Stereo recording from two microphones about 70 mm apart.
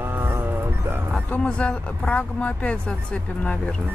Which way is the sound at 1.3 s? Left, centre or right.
Centre.